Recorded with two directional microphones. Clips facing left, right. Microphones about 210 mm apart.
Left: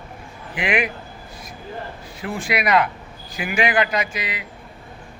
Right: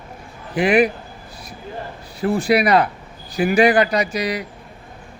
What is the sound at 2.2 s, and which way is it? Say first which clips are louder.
A man's voice: right 8 dB; 35° right (ahead or behind).